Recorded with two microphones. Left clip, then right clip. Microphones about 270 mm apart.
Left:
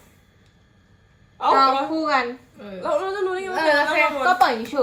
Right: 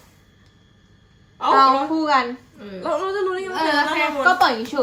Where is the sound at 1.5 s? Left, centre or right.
Right.